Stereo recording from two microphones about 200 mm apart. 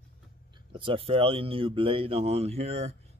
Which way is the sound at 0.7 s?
25° right (ahead or behind).